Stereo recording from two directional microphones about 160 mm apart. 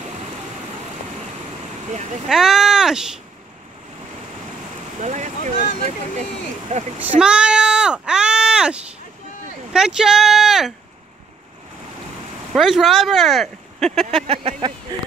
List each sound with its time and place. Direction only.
2.2 s speech: centre (ahead or behind)
5.0 s speech: 50° right (ahead or behind)
7.2 s a sound: 5° right (ahead or behind)
9.7 s speech: 5° right (ahead or behind)
12.5 s speech: centre (ahead or behind)
14.2 s speech: 35° right (ahead or behind)